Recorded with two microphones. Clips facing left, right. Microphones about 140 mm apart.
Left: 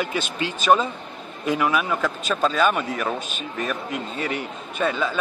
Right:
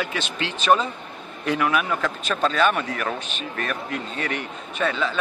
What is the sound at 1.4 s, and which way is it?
A man's voice, 10° left (ahead or behind).